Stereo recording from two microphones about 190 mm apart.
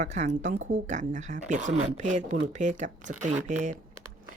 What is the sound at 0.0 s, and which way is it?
Speech, 35° right (ahead or behind).